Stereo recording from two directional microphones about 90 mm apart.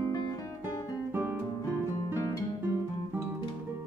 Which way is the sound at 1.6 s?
35° left (ahead or behind).